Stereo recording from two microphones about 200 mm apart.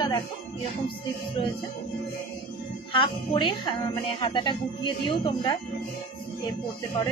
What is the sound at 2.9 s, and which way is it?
Speech, 25° left (ahead or behind).